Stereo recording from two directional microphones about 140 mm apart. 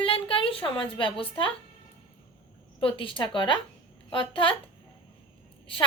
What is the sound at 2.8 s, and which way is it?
A woman's voice, 40° left (ahead or behind).